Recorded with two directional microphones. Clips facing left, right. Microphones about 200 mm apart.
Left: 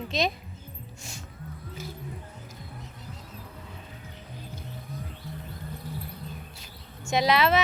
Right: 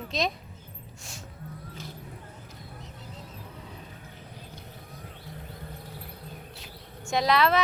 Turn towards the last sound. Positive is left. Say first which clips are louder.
# left 1 dB
turn(degrees=0)  # may be behind; listen again after turning